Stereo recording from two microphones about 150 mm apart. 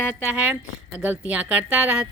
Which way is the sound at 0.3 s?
10° right (ahead or behind).